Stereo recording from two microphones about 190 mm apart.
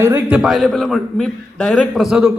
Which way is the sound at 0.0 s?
10° right (ahead or behind).